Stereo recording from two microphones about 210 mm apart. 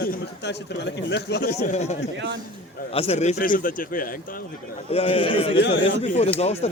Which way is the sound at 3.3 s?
40° left (ahead or behind).